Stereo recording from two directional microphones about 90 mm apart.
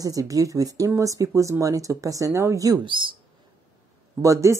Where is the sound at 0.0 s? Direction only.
40° right (ahead or behind).